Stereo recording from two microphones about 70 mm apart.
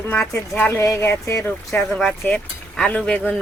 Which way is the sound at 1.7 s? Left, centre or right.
Centre.